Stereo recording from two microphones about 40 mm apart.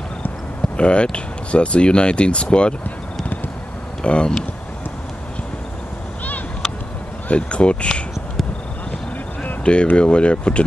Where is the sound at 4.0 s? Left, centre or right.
Left.